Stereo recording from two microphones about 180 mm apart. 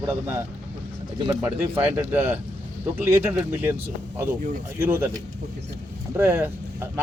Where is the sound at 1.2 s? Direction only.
10° right (ahead or behind).